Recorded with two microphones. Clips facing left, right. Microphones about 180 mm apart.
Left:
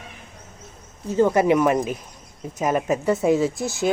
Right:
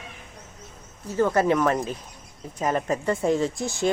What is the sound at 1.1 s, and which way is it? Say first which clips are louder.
Speech: left 4 dB; 15° left (ahead or behind).